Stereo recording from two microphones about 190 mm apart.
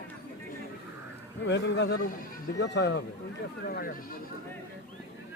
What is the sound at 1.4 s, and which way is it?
Speech, 65° left (ahead or behind).